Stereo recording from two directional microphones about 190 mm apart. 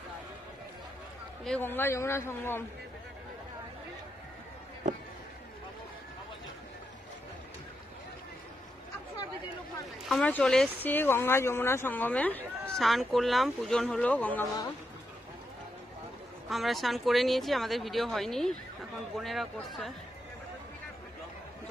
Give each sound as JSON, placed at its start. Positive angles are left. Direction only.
{"t": 1.4, "sound": "speech", "side_deg": 5}
{"t": 10.0, "sound": "speech", "side_deg": 5}
{"t": 16.4, "sound": "speech", "side_deg": 0}